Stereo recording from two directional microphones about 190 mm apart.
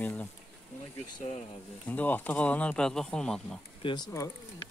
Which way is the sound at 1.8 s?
10° left (ahead or behind).